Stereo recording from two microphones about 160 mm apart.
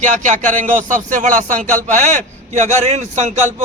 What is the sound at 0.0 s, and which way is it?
A man's voice, 50° right (ahead or behind).